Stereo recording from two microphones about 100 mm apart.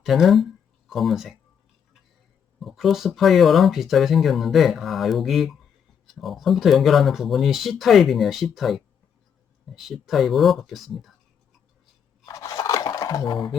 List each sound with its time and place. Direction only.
0.0 s speech: centre (ahead or behind)
2.6 s speech: centre (ahead or behind)
12.2 s a sound: 35° left (ahead or behind)
13.2 s speech: 55° left (ahead or behind)